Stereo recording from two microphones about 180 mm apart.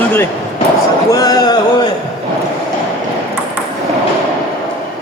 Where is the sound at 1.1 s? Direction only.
20° left (ahead or behind).